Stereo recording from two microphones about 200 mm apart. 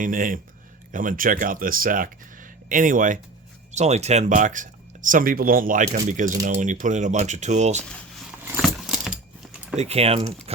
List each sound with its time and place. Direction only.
0.0 s speech: 40° right (ahead or behind)
8.6 s keys jangling: centre (ahead or behind)
9.7 s speech: 30° right (ahead or behind)